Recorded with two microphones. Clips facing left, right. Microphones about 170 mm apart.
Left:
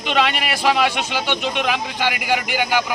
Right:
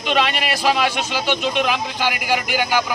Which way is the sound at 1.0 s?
15° left (ahead or behind).